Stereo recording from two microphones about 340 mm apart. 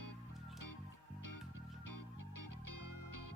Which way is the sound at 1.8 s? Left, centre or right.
Left.